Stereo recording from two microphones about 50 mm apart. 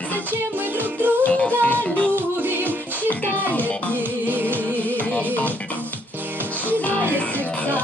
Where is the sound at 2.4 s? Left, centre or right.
Right.